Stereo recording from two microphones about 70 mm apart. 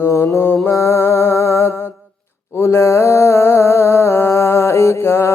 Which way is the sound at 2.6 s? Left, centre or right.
Left.